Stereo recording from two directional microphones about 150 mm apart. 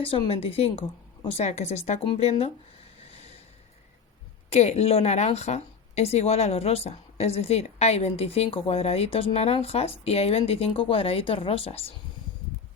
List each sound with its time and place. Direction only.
0.0 s a woman's voice: 40° left (ahead or behind)
4.4 s a woman's voice: 45° left (ahead or behind)